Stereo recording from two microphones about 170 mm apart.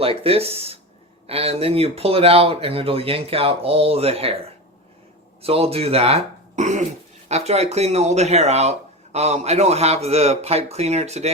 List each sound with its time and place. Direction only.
0.0 s speech: 35° right (ahead or behind)